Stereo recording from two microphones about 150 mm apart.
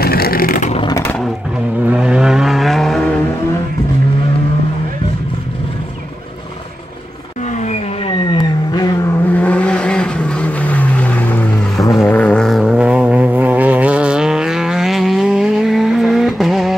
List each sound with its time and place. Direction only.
0.0 s vehicle: 90° left; by 0.7 s 75° left (ahead or behind)
1.9 s vehicle: 5° right (ahead or behind)
7.5 s vehicle: 50° left (ahead or behind)
8.3 s vehicle: 25° left (ahead or behind)
9.3 s vehicle: 10° left (ahead or behind)